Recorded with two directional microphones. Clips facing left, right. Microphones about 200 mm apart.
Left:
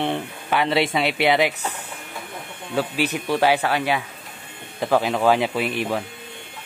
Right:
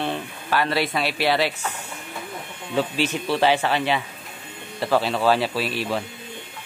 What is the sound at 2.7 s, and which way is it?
Speech, 10° left (ahead or behind).